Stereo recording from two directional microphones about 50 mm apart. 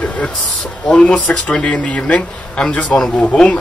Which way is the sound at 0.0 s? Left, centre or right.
Left.